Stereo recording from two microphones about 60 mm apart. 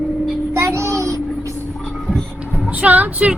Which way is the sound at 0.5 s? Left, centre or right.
Right.